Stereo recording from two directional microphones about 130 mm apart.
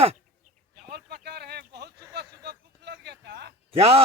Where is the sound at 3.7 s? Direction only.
50° right (ahead or behind).